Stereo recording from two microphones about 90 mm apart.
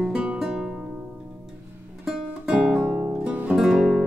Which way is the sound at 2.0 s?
10° right (ahead or behind).